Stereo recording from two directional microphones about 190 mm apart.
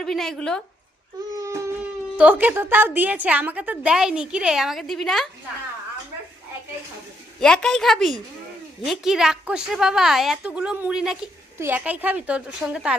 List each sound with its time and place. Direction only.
0.0 s a woman's voice: centre (ahead or behind)
1.3 s a sound: 15° right (ahead or behind)
2.1 s a woman's voice: 10° right (ahead or behind)
7.3 s a woman's voice: 5° left (ahead or behind)